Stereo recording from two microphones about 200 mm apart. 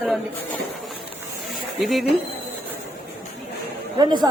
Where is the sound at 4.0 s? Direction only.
20° right (ahead or behind).